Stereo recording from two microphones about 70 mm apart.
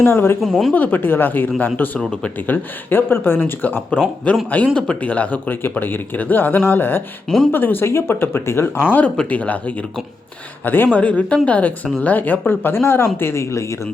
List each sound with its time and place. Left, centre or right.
0.0 s speech: left
0.4 s speech: centre
0.7 s speech: left
2.0 s speech: centre
2.5 s speech: left
4.5 s speech: centre
7.3 s speech: centre
7.5 s speech: left
8.9 s speech: centre
10.9 s a woman's voice: centre; by 13.7 s left